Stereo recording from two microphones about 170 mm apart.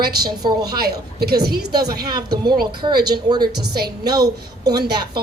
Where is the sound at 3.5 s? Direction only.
70° right (ahead or behind).